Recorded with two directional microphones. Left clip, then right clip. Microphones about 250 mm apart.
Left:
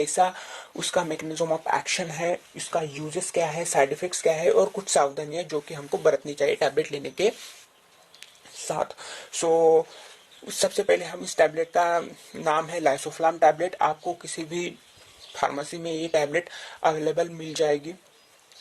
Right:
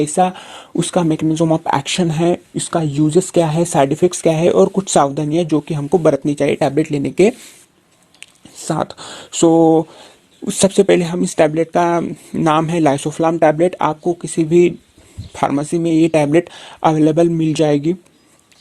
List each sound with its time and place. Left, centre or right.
0.0 s speech: right
3.2 s speech: right
3.6 s speech: right